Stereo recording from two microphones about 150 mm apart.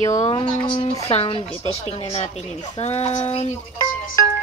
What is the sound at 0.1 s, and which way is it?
Speech, 25° left (ahead or behind).